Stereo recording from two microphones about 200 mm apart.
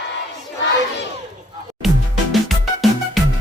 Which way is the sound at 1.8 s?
Centre (ahead or behind).